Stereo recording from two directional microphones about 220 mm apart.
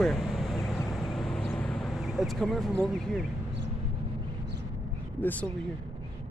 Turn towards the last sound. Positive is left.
turn(degrees=5)  # may be behind; listen again after turning